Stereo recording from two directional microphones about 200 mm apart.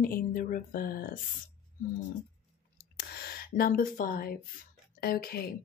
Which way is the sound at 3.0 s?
50° left (ahead or behind).